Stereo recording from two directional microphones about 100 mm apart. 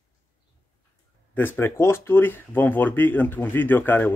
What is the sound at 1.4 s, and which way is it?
Speech, 20° left (ahead or behind).